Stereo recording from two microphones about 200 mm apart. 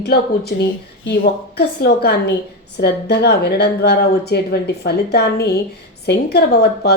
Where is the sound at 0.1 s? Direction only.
55° left (ahead or behind).